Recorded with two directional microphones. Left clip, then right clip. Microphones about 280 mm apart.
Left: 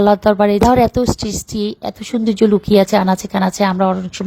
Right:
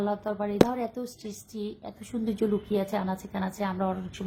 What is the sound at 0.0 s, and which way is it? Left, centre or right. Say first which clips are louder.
A woman's voice: left 18 dB; left.